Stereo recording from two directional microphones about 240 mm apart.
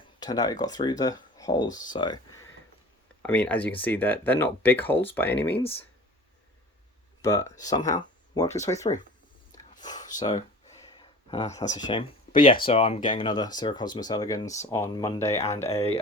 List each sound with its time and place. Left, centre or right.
0.2 s speech: centre
3.2 s speech: centre
7.2 s speech: centre
9.8 s a sound: centre
10.2 s speech: centre
11.0 s a sound: centre
11.6 s speech: left